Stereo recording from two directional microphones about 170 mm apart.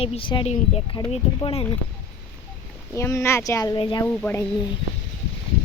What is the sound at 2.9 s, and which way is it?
Speech, 15° left (ahead or behind).